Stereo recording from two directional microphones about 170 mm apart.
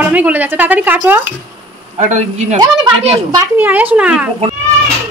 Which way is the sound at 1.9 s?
45° right (ahead or behind).